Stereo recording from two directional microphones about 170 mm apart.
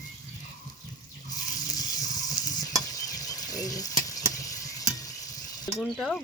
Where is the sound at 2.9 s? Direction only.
20° left (ahead or behind).